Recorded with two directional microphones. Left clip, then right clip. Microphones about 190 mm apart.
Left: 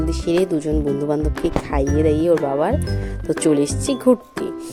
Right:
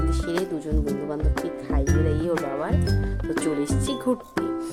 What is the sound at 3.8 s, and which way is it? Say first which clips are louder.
Speech: left 11 dB; 30° left (ahead or behind).